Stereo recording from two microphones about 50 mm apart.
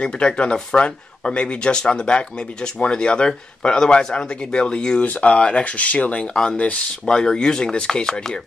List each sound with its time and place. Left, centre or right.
0.0 s speech: centre
5.0 s speech: left; by 6.6 s centre
6.6 s speech: left
7.1 s speech: centre